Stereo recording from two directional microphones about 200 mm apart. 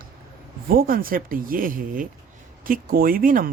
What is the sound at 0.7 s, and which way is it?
Speech, 45° right (ahead or behind).